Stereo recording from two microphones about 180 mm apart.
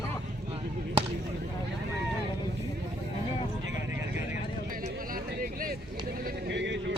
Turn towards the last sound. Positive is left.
turn(degrees=-80)